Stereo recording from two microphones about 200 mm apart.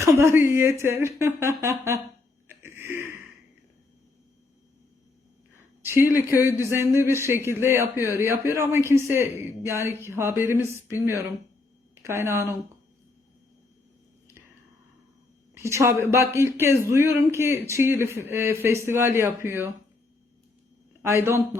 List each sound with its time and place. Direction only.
0.0 s speech: 15° right (ahead or behind)
2.5 s a sound: 10° right (ahead or behind)
5.8 s speech: 10° right (ahead or behind)
12.0 s speech: 15° right (ahead or behind)
15.5 s speech: 15° right (ahead or behind)
21.0 s speech: 15° right (ahead or behind)